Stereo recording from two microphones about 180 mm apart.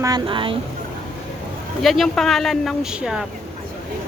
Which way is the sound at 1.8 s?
Centre (ahead or behind).